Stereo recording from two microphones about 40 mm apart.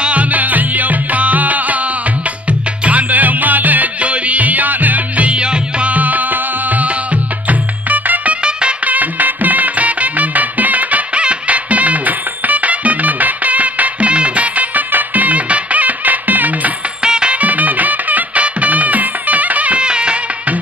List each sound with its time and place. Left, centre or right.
0.0 s music: right
2.8 s music: right
5.9 s music: right
7.4 s music: right
17.0 s music: centre
17.3 s music: right
19.8 s music: right